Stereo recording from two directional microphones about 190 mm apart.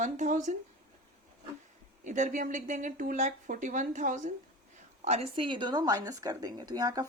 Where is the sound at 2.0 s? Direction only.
40° right (ahead or behind).